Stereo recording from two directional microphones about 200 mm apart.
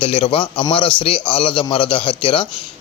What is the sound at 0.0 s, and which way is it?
A man's voice, 25° left (ahead or behind).